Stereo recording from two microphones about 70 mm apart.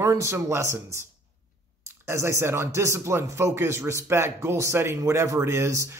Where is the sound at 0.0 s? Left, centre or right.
Right.